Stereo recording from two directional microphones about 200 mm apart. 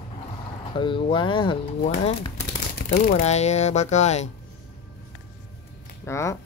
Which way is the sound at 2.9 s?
40° left (ahead or behind).